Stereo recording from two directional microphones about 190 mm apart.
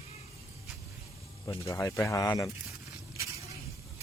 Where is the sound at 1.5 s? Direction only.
15° left (ahead or behind).